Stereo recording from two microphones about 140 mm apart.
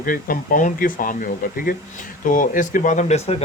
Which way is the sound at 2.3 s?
70° left (ahead or behind).